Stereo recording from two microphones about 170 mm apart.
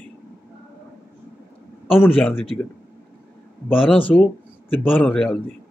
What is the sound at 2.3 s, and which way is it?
Speech, 35° left (ahead or behind).